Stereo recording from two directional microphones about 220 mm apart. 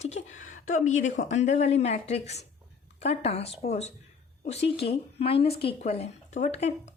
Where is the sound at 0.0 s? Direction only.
30° left (ahead or behind).